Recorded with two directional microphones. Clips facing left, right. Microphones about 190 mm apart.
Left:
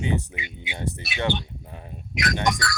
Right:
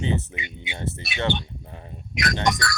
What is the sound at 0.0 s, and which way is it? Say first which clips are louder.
Speech: even; 10° left (ahead or behind).